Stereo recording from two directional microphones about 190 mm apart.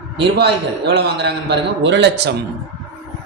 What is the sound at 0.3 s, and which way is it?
A man's voice, 65° right (ahead or behind).